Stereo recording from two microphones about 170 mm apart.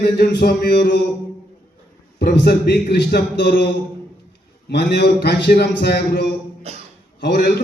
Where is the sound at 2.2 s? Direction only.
75° left (ahead or behind).